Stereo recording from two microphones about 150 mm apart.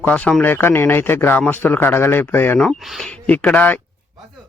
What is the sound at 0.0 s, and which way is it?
Speech, 10° left (ahead or behind).